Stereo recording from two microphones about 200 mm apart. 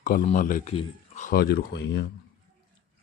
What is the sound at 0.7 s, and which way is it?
Speech, 30° left (ahead or behind).